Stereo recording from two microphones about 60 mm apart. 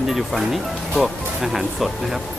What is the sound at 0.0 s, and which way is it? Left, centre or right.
Speech, centre.